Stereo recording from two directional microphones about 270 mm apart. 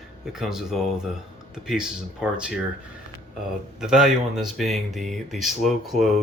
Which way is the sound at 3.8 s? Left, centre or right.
Centre.